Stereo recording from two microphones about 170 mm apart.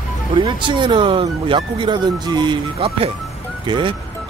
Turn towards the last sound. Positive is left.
turn(degrees=-30)  # may be behind; listen again after turning